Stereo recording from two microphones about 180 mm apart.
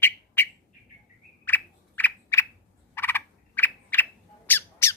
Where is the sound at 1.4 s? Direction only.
10° left (ahead or behind).